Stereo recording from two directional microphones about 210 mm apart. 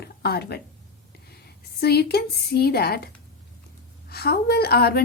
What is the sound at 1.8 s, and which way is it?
A woman's voice, 50° left (ahead or behind).